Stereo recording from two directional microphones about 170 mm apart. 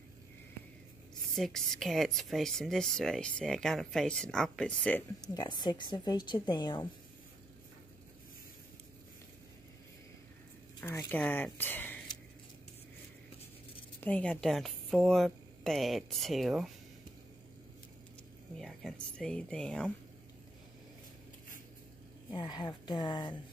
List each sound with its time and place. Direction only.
1.3 s speech: centre (ahead or behind)
5.2 s a woman's voice: 25° left (ahead or behind)
10.8 s speech: 10° left (ahead or behind)
14.0 s speech: 5° left (ahead or behind)
18.6 s speech: centre (ahead or behind)
22.3 s a woman's voice: 25° left (ahead or behind)